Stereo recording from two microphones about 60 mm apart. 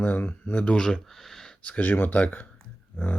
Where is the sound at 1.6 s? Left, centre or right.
Left.